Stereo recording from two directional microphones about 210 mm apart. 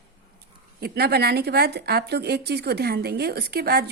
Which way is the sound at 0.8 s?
50° right (ahead or behind).